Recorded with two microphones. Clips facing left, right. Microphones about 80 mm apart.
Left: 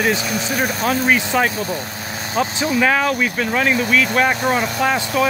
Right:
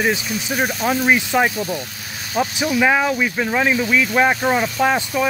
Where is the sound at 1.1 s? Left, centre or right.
Centre.